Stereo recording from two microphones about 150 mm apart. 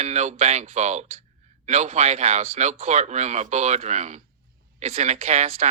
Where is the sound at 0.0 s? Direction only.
50° right (ahead or behind).